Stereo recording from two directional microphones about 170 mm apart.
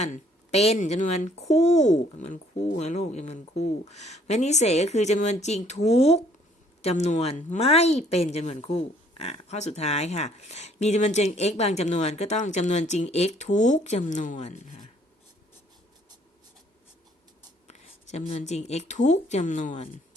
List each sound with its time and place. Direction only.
0.0 s a woman's voice: 40° left (ahead or behind)
17.7 s speech: 40° left (ahead or behind)